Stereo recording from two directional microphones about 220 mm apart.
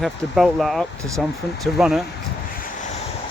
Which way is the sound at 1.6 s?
Centre (ahead or behind).